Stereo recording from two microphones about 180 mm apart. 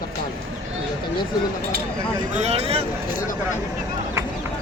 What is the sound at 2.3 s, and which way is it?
Speech, 35° right (ahead or behind).